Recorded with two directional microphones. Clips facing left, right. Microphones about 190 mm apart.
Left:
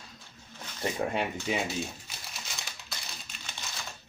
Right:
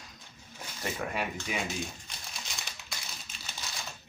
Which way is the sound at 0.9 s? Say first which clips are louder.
Left 4 dB; 25° left (ahead or behind).